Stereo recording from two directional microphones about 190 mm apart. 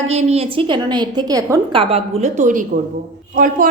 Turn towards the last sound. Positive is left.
turn(degrees=-45)  # may be behind; listen again after turning